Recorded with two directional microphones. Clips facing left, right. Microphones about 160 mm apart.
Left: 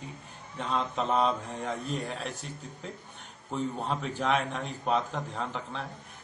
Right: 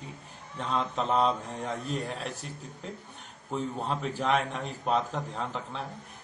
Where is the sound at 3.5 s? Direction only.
Centre (ahead or behind).